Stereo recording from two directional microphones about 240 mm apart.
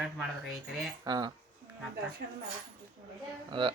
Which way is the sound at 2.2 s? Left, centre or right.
Right.